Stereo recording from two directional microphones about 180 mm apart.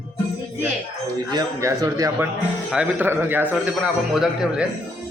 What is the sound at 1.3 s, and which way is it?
A man's voice, 20° right (ahead or behind).